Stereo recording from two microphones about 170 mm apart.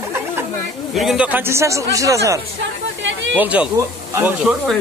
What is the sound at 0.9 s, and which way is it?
Speech, 5° right (ahead or behind).